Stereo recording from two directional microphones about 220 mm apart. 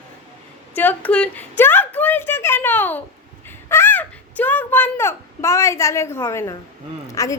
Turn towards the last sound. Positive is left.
turn(degrees=15)  # may be behind; listen again after turning